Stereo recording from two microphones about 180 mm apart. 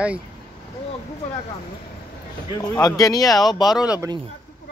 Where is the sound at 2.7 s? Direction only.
20° left (ahead or behind).